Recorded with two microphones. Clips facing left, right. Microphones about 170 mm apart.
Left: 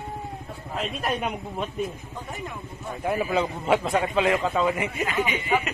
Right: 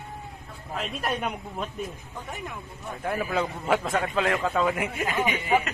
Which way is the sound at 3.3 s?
5° left (ahead or behind).